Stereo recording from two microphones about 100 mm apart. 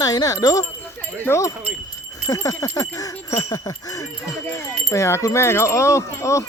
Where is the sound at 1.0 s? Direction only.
25° left (ahead or behind).